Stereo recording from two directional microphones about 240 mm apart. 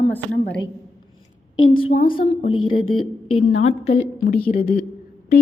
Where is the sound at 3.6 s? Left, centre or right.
Left.